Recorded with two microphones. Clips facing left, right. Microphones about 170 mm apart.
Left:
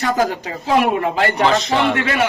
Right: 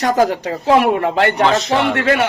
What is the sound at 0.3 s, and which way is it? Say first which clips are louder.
A man's voice: right 5 dB; 70° right (ahead or behind).